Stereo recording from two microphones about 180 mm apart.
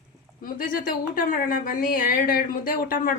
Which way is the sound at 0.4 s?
50° left (ahead or behind).